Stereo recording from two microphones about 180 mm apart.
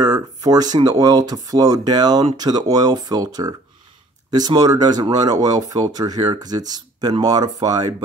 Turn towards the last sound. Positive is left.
turn(degrees=-20)  # may be behind; listen again after turning